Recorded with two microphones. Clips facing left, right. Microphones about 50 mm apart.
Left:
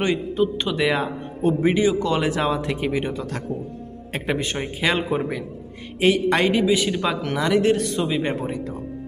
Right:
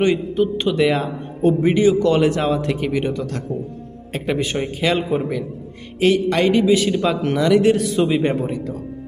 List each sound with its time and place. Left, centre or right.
0.6 s a man's voice: centre
4.3 s a man's voice: centre
6.2 s a man's voice: left
6.5 s speech: centre